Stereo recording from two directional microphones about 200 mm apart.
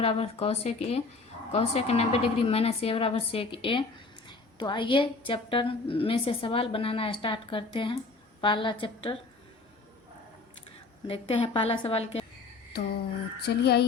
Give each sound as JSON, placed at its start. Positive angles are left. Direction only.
{"t": 0.0, "sound": "a woman's voice", "side_deg": 30}
{"t": 11.0, "sound": "a woman's voice", "side_deg": 25}
{"t": 13.4, "sound": "a sound", "side_deg": 55}